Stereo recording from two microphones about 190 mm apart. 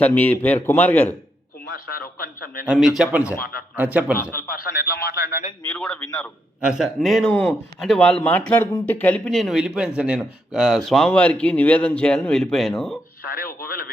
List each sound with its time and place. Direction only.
0.0 s a man's voice: 10° left (ahead or behind)
1.7 s speech: 50° left (ahead or behind)
2.6 s a man's voice: centre (ahead or behind)
4.3 s speech: 50° left (ahead or behind)
5.7 s speech: 5° left (ahead or behind)
13.2 s speech: 50° left (ahead or behind)